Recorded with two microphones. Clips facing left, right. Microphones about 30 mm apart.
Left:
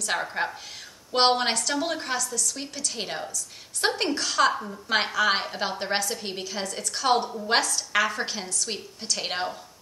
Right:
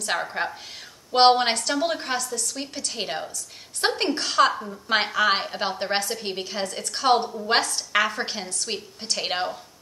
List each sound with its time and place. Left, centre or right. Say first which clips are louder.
0.1 s a woman's voice: right 1 dB; centre
1.5 s a woman's voice: right 3 dB; right
2.1 s a woman's voice: right 1 dB; right
2.5 s a woman's voice: right 2 dB; centre